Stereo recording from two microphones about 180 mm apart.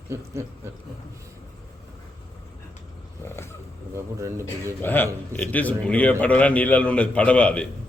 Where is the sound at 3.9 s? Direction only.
15° right (ahead or behind).